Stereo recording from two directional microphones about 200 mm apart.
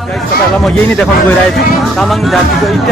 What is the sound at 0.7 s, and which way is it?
Speech, 5° left (ahead or behind).